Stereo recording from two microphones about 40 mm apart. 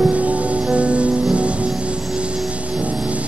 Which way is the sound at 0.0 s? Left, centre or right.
Right.